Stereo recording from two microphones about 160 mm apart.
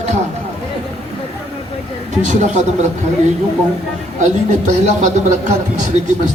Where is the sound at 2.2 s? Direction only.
45° right (ahead or behind).